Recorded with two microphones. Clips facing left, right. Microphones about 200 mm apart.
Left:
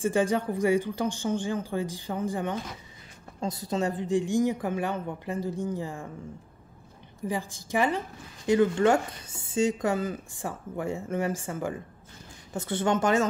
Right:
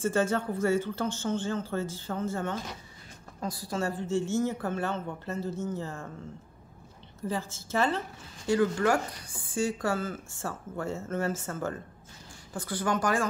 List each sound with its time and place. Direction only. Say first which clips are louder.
0.0 s speech: left 2 dB; 15° left (ahead or behind)
7.2 s speech: left 2 dB; 15° left (ahead or behind)
12.5 s a woman's voice: left 4 dB; 25° left (ahead or behind)